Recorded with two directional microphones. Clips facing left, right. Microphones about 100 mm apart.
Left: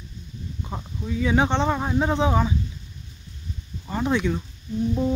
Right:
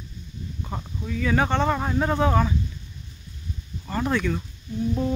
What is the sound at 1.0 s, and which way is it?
Speech, 15° left (ahead or behind).